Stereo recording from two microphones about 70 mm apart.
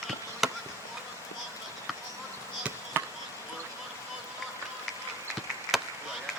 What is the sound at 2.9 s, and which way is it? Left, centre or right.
Basketball bounce, right.